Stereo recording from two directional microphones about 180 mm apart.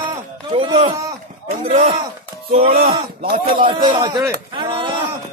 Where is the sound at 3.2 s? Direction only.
55° right (ahead or behind).